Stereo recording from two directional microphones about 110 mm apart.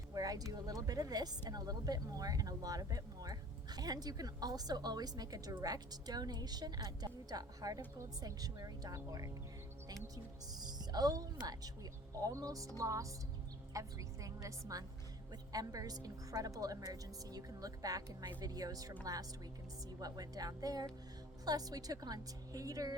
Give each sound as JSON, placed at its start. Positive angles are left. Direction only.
{"t": 0.1, "sound": "speech", "side_deg": -35}
{"t": 10.5, "sound": "speech", "side_deg": -35}
{"t": 20.0, "sound": "speech", "side_deg": -35}